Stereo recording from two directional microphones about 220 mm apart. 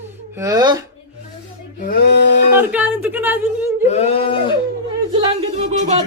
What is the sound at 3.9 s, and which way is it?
Speech, 30° left (ahead or behind).